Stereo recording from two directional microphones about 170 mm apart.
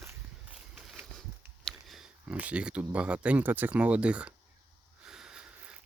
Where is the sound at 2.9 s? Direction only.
5° right (ahead or behind).